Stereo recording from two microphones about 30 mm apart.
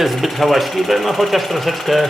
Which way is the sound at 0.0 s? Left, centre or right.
Centre.